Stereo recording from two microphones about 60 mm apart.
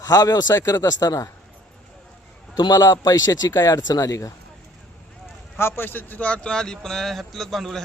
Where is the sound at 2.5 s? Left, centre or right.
Left.